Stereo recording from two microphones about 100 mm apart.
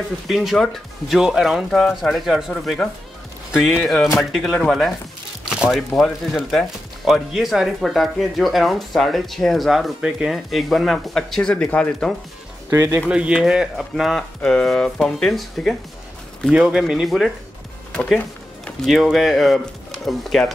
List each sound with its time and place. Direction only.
0.3 s speech: centre (ahead or behind)
12.6 s speech: 30° right (ahead or behind)
13.1 s speech: 10° right (ahead or behind)
16.4 s speech: 5° right (ahead or behind)
17.9 s speech: 10° left (ahead or behind)
18.9 s speech: centre (ahead or behind)